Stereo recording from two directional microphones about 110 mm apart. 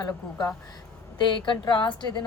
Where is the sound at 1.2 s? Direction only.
45° left (ahead or behind).